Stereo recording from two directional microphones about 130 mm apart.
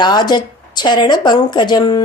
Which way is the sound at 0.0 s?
35° left (ahead or behind).